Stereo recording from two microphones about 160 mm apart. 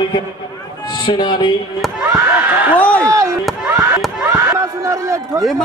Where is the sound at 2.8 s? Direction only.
10° left (ahead or behind).